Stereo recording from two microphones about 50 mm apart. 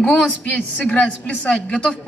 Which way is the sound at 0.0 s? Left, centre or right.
Left.